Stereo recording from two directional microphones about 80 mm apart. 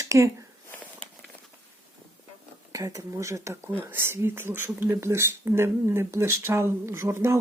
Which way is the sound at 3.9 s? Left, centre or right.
Right.